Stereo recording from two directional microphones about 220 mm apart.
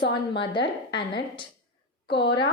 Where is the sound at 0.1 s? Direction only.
20° left (ahead or behind).